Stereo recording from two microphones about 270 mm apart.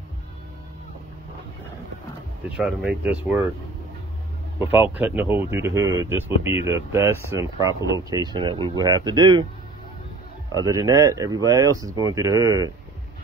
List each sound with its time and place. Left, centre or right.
2.5 s speech: centre
4.6 s speech: centre
10.6 s speech: centre